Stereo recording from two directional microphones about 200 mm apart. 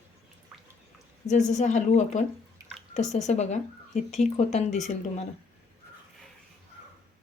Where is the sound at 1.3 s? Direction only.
35° left (ahead or behind).